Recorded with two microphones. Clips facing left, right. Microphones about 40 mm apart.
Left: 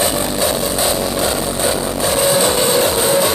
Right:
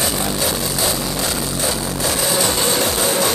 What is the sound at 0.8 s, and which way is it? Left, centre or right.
Music, left.